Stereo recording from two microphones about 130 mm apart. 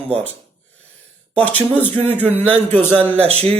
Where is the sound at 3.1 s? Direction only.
55° right (ahead or behind).